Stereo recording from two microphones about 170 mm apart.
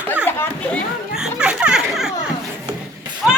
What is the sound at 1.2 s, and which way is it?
Music, 5° right (ahead or behind).